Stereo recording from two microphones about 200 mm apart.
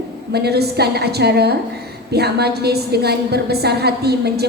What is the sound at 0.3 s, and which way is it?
A woman's voice, 55° right (ahead or behind).